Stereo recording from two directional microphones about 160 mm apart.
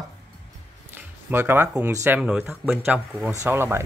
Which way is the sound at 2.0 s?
10° right (ahead or behind).